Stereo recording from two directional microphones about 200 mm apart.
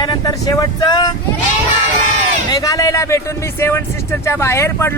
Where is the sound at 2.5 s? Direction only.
15° left (ahead or behind).